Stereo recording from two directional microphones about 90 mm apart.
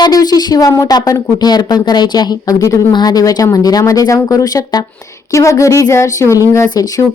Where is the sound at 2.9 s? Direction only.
50° left (ahead or behind).